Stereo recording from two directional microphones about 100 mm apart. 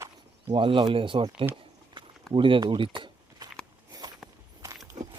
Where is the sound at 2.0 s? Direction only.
55° right (ahead or behind).